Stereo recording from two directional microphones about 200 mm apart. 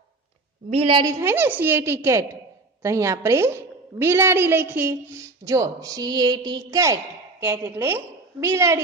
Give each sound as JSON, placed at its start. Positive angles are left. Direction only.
{"t": 0.7, "sound": "a woman's voice", "side_deg": -30}
{"t": 1.0, "sound": "a woman's voice", "side_deg": -10}